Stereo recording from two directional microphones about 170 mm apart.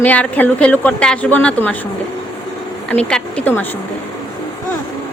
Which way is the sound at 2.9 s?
5° left (ahead or behind).